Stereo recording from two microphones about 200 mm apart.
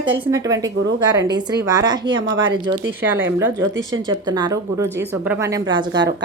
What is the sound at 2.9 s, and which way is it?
Speech, 10° right (ahead or behind).